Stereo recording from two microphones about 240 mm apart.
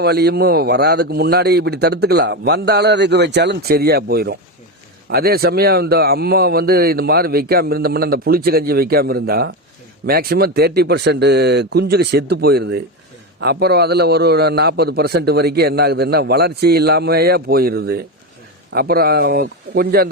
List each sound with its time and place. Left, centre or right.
0.0 s a man's voice: right